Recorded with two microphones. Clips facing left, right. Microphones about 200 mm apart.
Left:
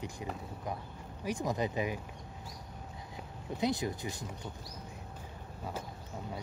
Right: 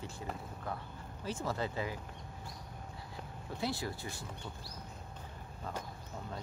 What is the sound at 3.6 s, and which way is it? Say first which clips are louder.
Speech: left 5 dB; 20° left (ahead or behind).